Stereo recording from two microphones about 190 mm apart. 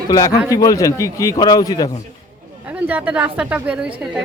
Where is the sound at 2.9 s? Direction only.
10° right (ahead or behind).